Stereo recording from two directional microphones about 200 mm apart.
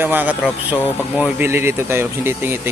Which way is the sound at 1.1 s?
10° right (ahead or behind).